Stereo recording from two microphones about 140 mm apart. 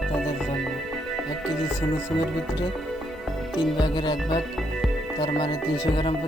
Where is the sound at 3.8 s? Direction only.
35° left (ahead or behind).